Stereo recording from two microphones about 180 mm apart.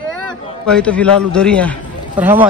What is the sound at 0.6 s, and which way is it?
A man's voice, 5° left (ahead or behind).